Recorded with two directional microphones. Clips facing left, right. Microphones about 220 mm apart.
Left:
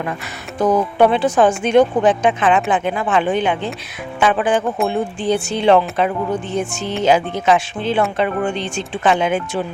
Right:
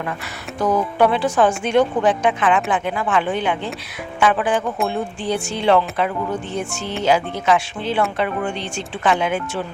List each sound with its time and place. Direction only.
0.6 s a woman's voice: 20° left (ahead or behind)